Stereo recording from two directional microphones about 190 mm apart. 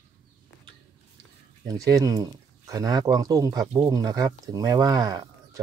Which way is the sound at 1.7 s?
15° right (ahead or behind).